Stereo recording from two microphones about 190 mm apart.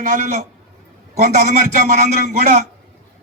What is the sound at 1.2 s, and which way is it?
A man's voice, 35° right (ahead or behind).